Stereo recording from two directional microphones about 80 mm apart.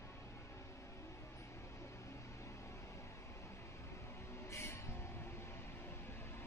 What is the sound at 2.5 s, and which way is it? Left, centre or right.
Vehicle, left.